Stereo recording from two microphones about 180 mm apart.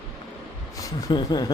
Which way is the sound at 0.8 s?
20° left (ahead or behind).